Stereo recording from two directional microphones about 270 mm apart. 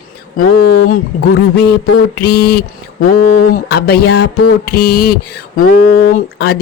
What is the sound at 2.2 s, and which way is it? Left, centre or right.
Speech, left.